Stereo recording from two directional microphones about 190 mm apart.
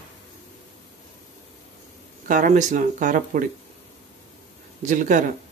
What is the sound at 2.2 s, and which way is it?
Speech, 45° right (ahead or behind).